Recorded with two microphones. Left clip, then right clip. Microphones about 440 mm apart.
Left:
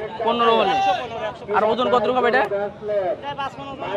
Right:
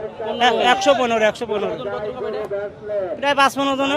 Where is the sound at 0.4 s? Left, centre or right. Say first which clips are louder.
Right 3 dB; right.